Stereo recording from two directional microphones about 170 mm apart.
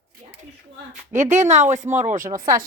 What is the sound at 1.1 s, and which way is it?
Speech, 45° right (ahead or behind).